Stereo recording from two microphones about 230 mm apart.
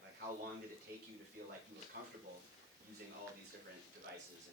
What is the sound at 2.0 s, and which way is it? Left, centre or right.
Speech, right.